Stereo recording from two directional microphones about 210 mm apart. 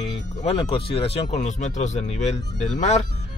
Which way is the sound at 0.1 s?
30° left (ahead or behind).